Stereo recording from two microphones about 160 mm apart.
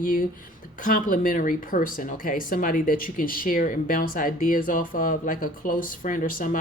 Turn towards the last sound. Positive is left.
turn(degrees=55)  # may be behind; listen again after turning